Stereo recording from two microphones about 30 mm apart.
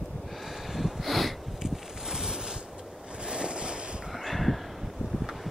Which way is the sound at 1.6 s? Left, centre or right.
Centre.